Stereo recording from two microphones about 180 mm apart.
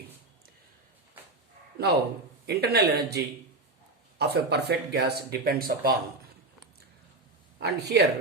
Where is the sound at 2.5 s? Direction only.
65° right (ahead or behind).